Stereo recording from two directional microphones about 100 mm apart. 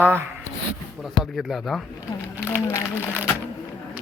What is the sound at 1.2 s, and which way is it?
Speech, centre (ahead or behind).